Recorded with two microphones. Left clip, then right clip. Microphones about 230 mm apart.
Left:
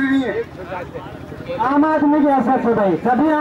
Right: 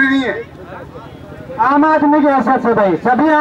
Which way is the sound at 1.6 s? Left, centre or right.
Centre.